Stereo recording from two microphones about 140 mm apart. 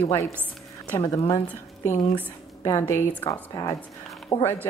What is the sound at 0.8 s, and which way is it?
A woman's voice, 20° left (ahead or behind).